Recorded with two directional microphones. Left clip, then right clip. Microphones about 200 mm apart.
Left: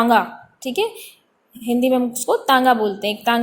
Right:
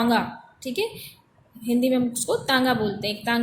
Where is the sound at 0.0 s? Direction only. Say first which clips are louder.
Left 7 dB; 25° left (ahead or behind).